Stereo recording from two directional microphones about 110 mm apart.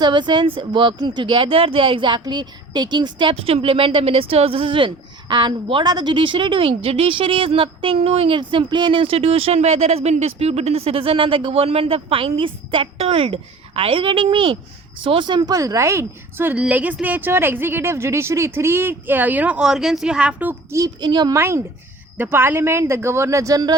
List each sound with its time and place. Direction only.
0.0 s a woman's voice: 45° right (ahead or behind); by 20.7 s 15° right (ahead or behind)
20.7 s a woman's voice: 30° right (ahead or behind)
21.1 s speech: 40° right (ahead or behind)
21.3 s a woman's voice: 20° right (ahead or behind)